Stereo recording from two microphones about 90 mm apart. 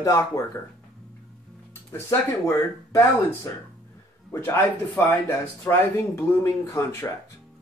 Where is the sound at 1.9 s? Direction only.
35° left (ahead or behind).